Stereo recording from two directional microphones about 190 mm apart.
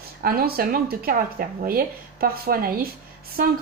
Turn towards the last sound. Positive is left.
turn(degrees=-45)  # may be behind; listen again after turning